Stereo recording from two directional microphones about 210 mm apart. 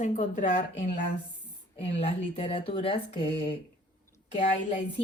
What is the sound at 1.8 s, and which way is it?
A woman's voice, 30° left (ahead or behind).